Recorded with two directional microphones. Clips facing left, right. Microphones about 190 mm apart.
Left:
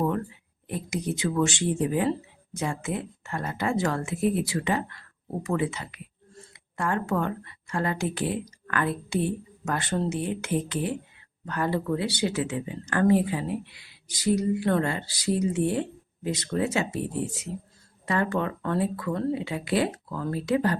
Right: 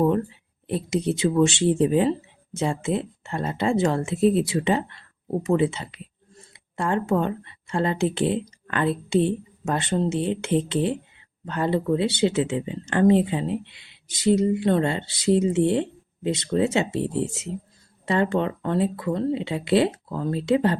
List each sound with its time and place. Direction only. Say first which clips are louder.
0.0 s speech: right 6 dB; 25° right (ahead or behind)